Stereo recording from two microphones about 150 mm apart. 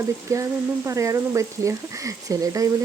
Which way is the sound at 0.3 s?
20° right (ahead or behind).